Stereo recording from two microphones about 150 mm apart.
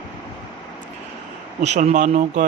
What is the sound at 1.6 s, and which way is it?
Speech, 50° right (ahead or behind).